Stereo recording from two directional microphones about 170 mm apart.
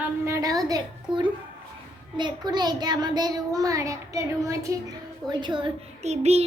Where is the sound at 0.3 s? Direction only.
20° right (ahead or behind).